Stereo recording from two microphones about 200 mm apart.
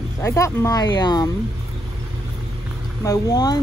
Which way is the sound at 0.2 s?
15° left (ahead or behind).